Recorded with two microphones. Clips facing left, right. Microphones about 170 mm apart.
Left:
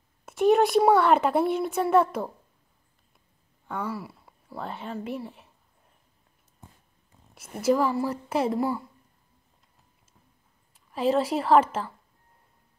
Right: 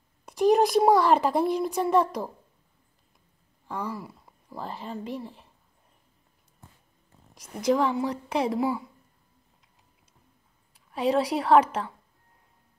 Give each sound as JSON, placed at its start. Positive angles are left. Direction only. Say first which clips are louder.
{"t": 0.2, "sound": "a child's voice", "louder": "even", "side_deg": 0}
{"t": 3.6, "sound": "speech", "louder": "left 1 dB", "side_deg": 5}
{"t": 7.3, "sound": "a child's voice", "louder": "left 1 dB", "side_deg": 5}
{"t": 10.9, "sound": "a child's voice", "louder": "even", "side_deg": 0}